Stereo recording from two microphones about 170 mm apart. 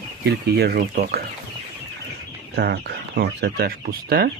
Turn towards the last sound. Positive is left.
turn(degrees=-60)  # may be behind; listen again after turning